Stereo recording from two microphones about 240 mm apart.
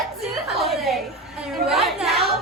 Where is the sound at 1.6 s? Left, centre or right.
Centre.